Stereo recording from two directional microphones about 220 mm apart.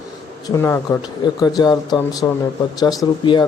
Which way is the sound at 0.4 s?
15° left (ahead or behind).